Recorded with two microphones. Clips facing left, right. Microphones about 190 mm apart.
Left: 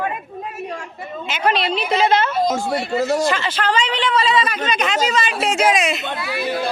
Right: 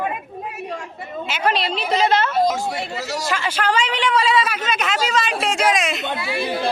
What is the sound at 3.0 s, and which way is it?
Speech, 50° left (ahead or behind).